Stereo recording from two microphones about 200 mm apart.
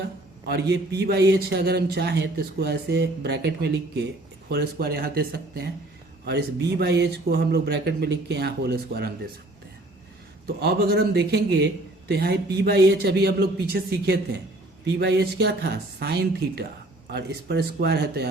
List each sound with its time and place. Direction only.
0.4 s a man's voice: 55° right (ahead or behind)
10.4 s a man's voice: 50° right (ahead or behind)